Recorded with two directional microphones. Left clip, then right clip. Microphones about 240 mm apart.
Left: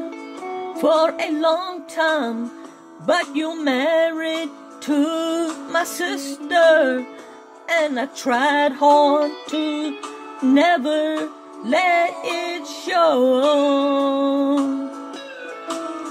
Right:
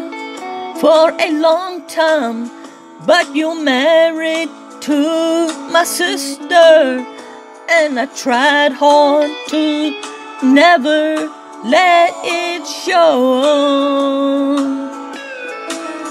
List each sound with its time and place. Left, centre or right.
0.7 s music: centre
10.5 s music: centre
15.6 s music: right